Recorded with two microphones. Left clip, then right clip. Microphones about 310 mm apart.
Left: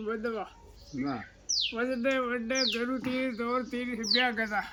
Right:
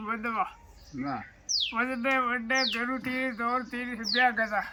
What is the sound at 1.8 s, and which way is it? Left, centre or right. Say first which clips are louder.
Speech: right 4 dB; centre.